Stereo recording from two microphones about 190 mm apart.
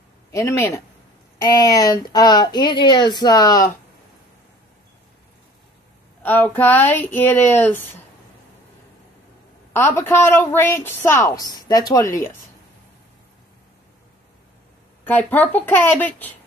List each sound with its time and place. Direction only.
0.3 s a woman's voice: 15° left (ahead or behind)
6.2 s a woman's voice: 10° left (ahead or behind)
9.7 s a woman's voice: 10° left (ahead or behind)
15.0 s a woman's voice: 10° left (ahead or behind)